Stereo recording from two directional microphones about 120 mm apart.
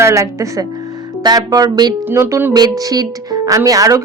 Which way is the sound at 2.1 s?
20° right (ahead or behind).